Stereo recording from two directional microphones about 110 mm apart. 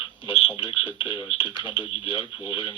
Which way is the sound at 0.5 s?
50° left (ahead or behind).